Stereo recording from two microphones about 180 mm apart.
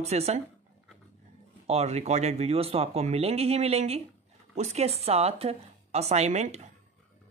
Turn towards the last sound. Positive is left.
turn(degrees=-40)  # may be behind; listen again after turning